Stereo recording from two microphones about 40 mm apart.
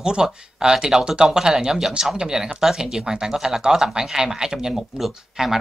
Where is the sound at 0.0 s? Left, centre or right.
Centre.